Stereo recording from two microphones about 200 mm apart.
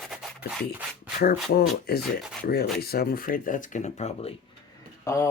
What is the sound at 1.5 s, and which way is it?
Speech, 50° left (ahead or behind).